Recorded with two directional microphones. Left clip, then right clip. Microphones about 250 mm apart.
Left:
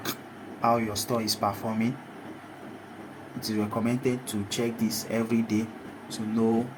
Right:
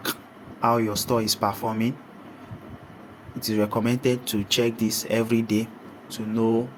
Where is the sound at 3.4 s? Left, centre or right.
Right.